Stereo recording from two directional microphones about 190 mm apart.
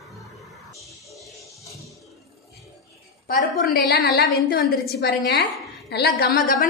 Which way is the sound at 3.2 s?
50° left (ahead or behind).